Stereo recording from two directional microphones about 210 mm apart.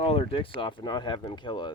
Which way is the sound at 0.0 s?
25° left (ahead or behind).